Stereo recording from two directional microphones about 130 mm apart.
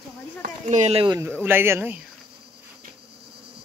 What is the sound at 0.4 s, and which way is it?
Speech, 70° right (ahead or behind).